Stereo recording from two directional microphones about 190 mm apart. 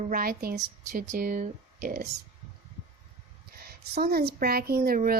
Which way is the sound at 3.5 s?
55° right (ahead or behind).